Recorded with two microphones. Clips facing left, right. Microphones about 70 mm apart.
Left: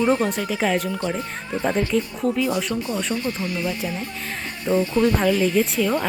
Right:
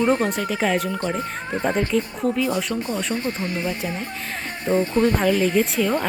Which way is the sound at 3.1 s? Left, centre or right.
Right.